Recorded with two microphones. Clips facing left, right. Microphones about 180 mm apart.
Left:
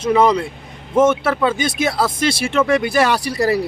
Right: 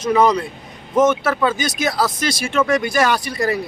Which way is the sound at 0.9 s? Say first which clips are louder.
Left 1 dB; 30° left (ahead or behind).